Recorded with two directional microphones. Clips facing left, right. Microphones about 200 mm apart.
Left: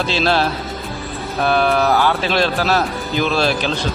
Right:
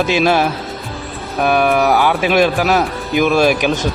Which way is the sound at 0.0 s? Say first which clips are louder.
Right 4 dB; 15° right (ahead or behind).